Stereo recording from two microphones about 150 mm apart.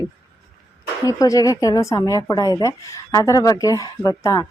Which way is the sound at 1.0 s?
20° left (ahead or behind).